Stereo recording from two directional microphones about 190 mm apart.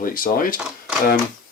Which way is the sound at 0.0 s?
45° left (ahead or behind).